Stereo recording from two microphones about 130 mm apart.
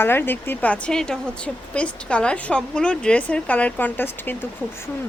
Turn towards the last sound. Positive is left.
turn(degrees=15)  # may be behind; listen again after turning